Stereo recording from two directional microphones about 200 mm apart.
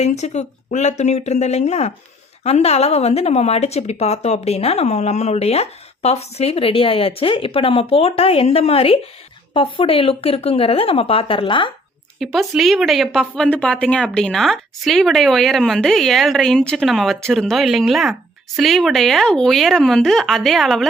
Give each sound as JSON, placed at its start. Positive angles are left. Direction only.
{"t": 0.0, "sound": "a woman's voice", "side_deg": 35}
{"t": 12.2, "sound": "speech", "side_deg": 0}